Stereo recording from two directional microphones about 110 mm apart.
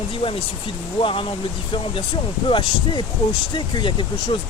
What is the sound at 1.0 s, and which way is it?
Speech, 50° left (ahead or behind).